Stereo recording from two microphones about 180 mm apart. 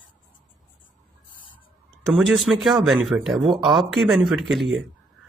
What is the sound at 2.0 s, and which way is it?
Speech, centre (ahead or behind).